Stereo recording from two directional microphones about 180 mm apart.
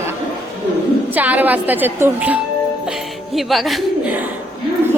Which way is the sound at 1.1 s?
10° right (ahead or behind).